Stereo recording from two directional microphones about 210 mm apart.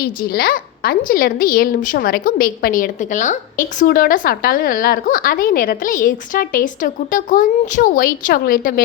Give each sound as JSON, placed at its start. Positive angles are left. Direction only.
{"t": 0.0, "sound": "a woman's voice", "side_deg": 45}